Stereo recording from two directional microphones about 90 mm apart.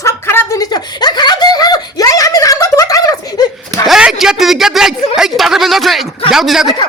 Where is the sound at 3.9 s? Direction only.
5° right (ahead or behind).